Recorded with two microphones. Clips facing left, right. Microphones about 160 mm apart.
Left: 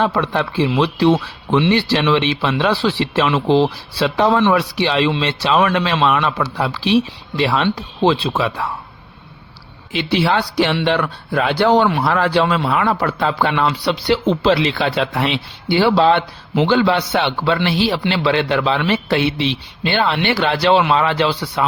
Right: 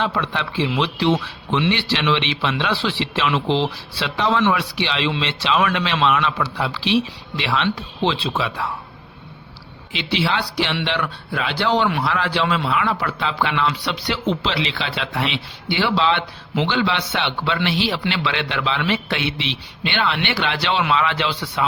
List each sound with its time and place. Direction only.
0.0 s speech: 45° left (ahead or behind)
9.9 s speech: 50° left (ahead or behind)
14.4 s a man's voice: 50° left (ahead or behind)